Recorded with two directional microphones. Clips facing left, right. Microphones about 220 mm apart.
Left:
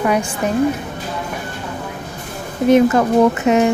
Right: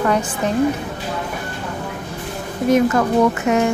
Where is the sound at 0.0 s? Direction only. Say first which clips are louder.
Left 1 dB; 10° left (ahead or behind).